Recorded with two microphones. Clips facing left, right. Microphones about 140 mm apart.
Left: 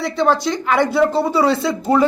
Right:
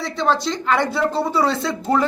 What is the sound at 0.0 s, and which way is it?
A woman's voice, 10° left (ahead or behind).